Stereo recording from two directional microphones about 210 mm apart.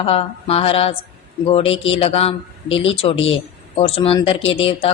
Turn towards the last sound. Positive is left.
turn(degrees=25)  # may be behind; listen again after turning